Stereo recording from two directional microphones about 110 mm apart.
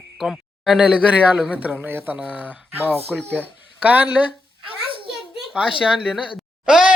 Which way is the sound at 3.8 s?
15° right (ahead or behind).